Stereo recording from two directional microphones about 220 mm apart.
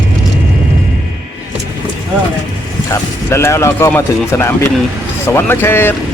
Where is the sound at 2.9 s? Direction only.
10° left (ahead or behind).